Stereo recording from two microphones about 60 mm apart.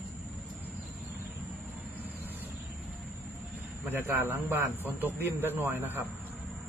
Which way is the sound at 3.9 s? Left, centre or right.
Right.